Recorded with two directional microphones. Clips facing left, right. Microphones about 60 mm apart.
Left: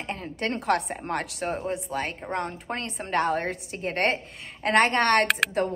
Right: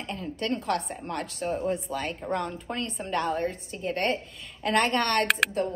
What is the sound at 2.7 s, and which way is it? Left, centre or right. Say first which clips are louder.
A woman's voice: left 3 dB; left.